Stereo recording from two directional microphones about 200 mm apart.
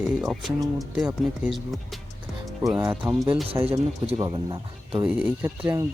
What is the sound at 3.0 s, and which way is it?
Speech, 5° right (ahead or behind).